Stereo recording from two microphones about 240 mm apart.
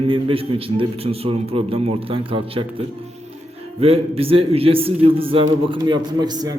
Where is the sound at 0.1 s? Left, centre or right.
Right.